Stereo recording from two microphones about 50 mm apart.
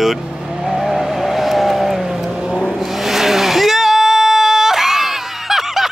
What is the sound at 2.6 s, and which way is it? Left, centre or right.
Vehicle, centre.